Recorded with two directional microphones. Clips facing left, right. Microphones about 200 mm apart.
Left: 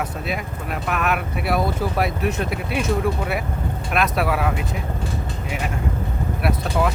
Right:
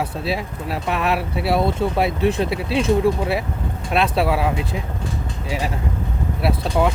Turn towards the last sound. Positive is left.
turn(degrees=-30)  # may be behind; listen again after turning